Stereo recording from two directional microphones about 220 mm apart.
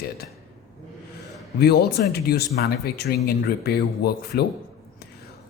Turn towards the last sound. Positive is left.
turn(degrees=45)  # may be behind; listen again after turning